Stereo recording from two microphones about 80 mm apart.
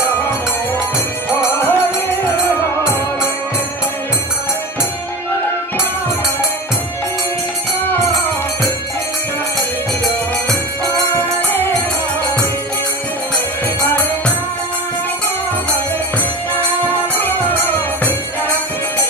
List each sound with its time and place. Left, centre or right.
1.3 s music: left
11.1 s music: left
17.1 s music: left